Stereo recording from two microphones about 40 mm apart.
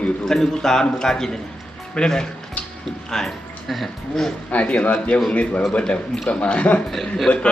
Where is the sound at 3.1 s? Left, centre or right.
Centre.